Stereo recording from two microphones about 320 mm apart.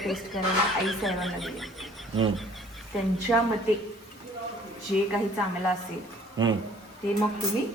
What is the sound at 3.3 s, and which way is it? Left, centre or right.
Speech, centre.